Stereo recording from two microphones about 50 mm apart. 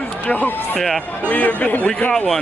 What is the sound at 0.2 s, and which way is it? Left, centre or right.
Speech, left.